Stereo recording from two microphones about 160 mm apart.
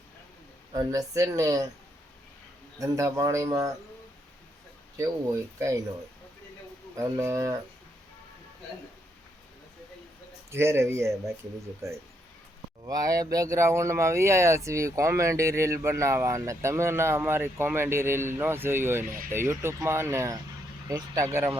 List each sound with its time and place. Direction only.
0.7 s a man's voice: 20° right (ahead or behind)
2.7 s a man's voice: 20° right (ahead or behind)
4.9 s a man's voice: 20° right (ahead or behind)
7.2 s a man's voice: 20° right (ahead or behind)
10.5 s a man's voice: 15° right (ahead or behind)